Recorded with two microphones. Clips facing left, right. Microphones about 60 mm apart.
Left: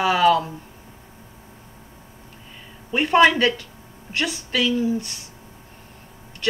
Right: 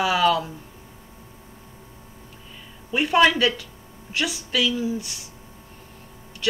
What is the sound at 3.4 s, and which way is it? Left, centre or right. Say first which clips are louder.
Speech: left 2 dB; left.